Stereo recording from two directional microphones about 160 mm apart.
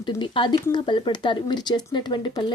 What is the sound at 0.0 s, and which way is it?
Speech, 30° left (ahead or behind).